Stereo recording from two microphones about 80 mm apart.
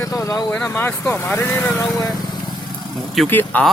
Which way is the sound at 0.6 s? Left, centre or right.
Left.